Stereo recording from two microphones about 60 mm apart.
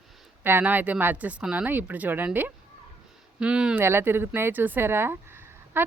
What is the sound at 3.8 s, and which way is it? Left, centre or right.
A woman's voice, right.